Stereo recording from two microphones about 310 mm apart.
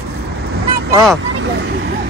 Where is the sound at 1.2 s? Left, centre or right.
Right.